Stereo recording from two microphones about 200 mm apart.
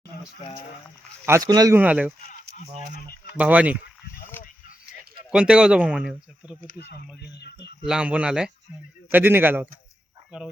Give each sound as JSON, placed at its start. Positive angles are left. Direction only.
{"t": 1.2, "sound": "speech", "side_deg": -15}
{"t": 2.6, "sound": "speech", "side_deg": 45}
{"t": 3.3, "sound": "speech", "side_deg": -5}
{"t": 4.3, "sound": "a sound", "side_deg": 10}
{"t": 5.3, "sound": "speech", "side_deg": -5}
{"t": 6.6, "sound": "speech", "side_deg": 45}
{"t": 7.3, "sound": "speech", "side_deg": 55}
{"t": 7.9, "sound": "speech", "side_deg": -5}